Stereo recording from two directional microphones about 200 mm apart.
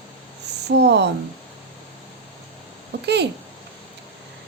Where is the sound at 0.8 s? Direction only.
55° right (ahead or behind).